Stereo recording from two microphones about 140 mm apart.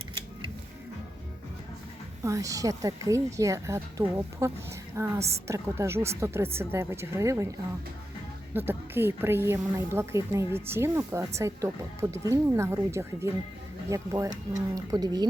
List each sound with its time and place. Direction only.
2.2 s a woman's voice: 25° right (ahead or behind)
8.5 s a woman's voice: 15° right (ahead or behind)